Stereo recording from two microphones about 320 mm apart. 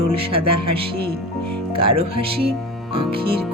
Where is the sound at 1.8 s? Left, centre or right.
Centre.